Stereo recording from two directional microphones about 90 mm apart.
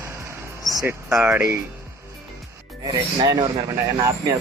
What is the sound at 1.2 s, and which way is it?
Speech, 25° right (ahead or behind).